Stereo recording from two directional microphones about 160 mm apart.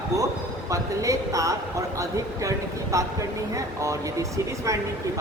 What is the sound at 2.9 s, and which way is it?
Speech, 20° right (ahead or behind).